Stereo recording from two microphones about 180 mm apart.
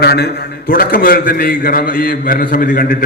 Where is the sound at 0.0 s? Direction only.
60° left (ahead or behind).